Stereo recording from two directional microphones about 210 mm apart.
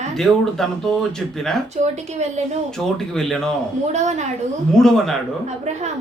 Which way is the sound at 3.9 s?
35° right (ahead or behind).